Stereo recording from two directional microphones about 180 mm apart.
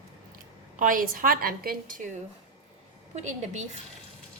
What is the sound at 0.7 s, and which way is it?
A woman's voice, 45° right (ahead or behind).